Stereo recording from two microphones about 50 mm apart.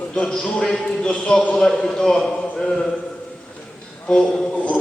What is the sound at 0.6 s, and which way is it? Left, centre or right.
A man's voice, centre.